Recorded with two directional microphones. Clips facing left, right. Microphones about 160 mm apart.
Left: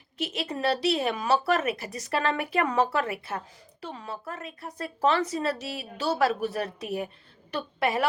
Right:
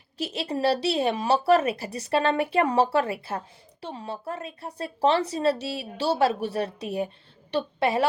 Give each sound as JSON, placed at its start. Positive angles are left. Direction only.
{"t": 0.2, "sound": "speech", "side_deg": -30}